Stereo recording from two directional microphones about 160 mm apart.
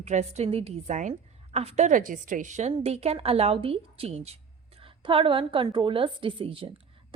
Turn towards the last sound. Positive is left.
turn(degrees=-35)  # may be behind; listen again after turning